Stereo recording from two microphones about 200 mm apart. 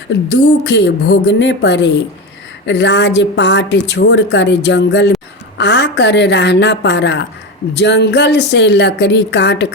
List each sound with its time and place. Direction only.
0.3 s a woman's voice: 60° left (ahead or behind)